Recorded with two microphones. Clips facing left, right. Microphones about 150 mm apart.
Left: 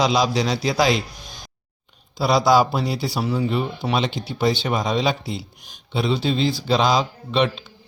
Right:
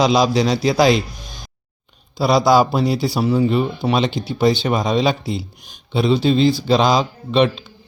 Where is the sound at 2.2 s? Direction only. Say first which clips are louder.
Right 3 dB; 45° right (ahead or behind).